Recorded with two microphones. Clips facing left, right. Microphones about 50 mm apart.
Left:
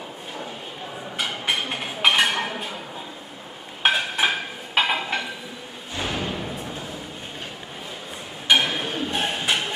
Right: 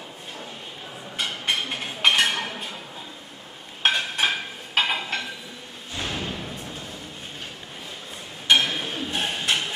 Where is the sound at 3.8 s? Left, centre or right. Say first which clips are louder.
Left 2 dB; centre.